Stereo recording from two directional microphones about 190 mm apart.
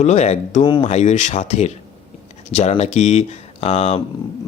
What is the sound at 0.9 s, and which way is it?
Speech, 35° left (ahead or behind).